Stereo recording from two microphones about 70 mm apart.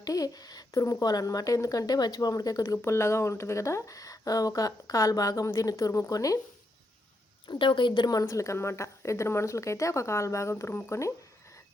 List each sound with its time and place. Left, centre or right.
0.0 s speech: left
2.7 s speech: left
7.4 s a woman's voice: left
8.2 s speech: left